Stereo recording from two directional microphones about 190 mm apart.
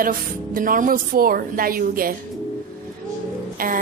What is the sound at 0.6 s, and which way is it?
A woman's voice, 45° right (ahead or behind).